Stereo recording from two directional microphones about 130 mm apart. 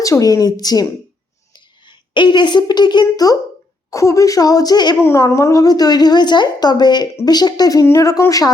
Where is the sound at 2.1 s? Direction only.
35° left (ahead or behind).